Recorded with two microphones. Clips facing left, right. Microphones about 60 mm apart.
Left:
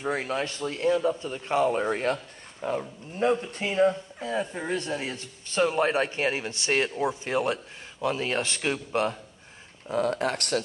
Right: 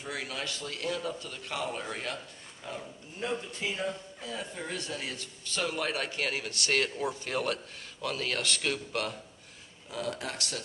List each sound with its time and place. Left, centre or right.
0.0 s speech: left
3.8 s a man's voice: left
9.8 s speech: left